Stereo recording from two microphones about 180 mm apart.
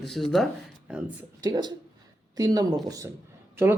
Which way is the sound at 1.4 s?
20° right (ahead or behind).